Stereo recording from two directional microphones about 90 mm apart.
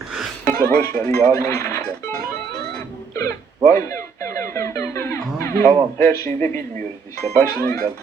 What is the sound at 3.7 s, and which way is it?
Music, 30° left (ahead or behind).